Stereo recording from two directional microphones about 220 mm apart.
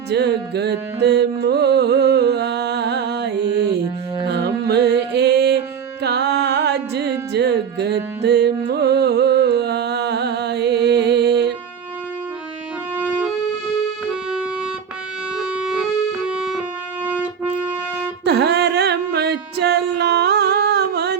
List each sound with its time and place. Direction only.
0.1 s music: 50° right (ahead or behind)
13.0 s music: 5° right (ahead or behind)
18.3 s a sound: 50° right (ahead or behind)